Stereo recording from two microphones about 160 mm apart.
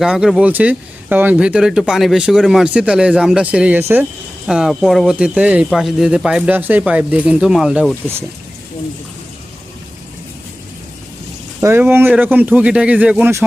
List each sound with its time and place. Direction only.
0.0 s speech: 5° right (ahead or behind)
11.6 s speech: 15° right (ahead or behind)